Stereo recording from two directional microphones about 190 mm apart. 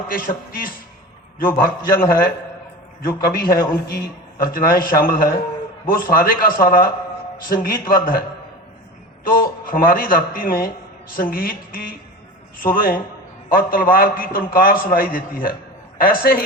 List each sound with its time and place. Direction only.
0.1 s a man's voice: 50° left (ahead or behind)
9.2 s a man's voice: 50° left (ahead or behind)